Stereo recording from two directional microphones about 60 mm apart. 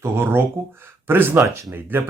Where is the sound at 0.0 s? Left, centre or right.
Right.